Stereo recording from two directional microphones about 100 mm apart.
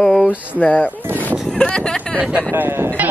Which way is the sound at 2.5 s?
25° right (ahead or behind).